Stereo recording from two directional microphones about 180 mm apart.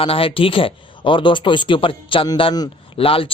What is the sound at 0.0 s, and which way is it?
Speech, 30° left (ahead or behind).